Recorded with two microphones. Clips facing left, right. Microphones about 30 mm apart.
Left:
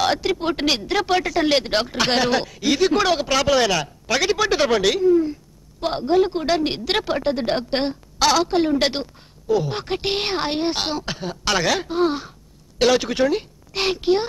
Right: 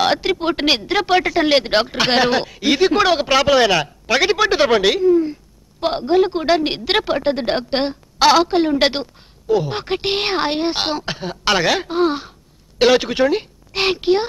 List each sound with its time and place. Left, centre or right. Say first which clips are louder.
0.0 s a woman's voice: right 3 dB; right